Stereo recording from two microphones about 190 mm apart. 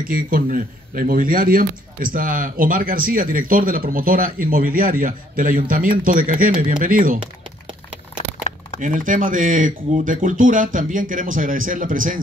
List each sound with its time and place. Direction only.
0.1 s a man's voice: 45° right (ahead or behind)
8.8 s a man's voice: 45° right (ahead or behind)